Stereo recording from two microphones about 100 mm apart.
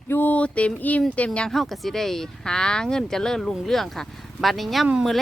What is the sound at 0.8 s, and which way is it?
Speech, 15° left (ahead or behind).